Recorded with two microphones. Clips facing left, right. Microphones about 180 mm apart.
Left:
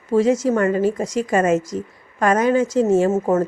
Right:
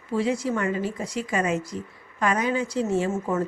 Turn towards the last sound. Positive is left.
turn(degrees=40)  # may be behind; listen again after turning